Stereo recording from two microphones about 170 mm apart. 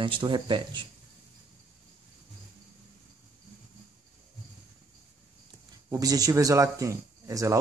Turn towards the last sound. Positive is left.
turn(degrees=-20)  # may be behind; listen again after turning